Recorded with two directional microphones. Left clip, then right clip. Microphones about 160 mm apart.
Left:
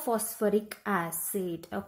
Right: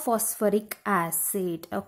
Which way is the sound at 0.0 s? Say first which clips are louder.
Right 4 dB; 20° right (ahead or behind).